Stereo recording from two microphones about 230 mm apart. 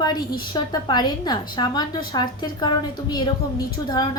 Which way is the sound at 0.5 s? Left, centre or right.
Centre.